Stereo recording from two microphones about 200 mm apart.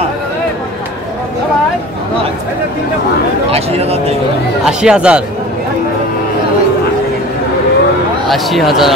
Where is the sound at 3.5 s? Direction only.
30° right (ahead or behind).